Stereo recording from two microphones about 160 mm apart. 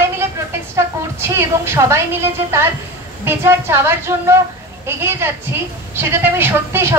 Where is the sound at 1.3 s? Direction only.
15° right (ahead or behind).